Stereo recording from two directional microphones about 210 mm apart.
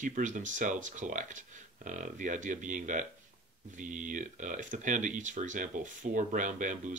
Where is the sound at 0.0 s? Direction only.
35° right (ahead or behind).